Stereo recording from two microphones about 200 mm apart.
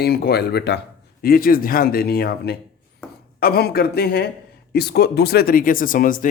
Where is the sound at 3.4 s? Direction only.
50° left (ahead or behind).